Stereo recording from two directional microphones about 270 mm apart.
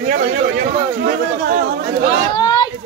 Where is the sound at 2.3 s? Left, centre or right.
Centre.